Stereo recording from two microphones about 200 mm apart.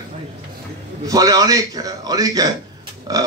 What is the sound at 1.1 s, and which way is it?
A man's voice, 15° right (ahead or behind).